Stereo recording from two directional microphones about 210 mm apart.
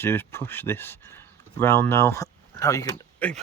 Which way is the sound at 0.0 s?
10° left (ahead or behind).